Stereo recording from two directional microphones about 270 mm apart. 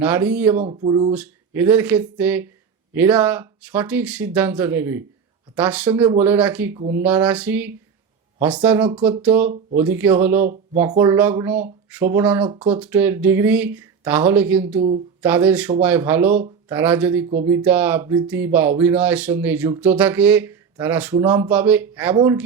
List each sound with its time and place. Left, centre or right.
0.0 s speech: centre
0.6 s speech: right
1.1 s speech: centre
14.8 s speech: right
15.2 s speech: centre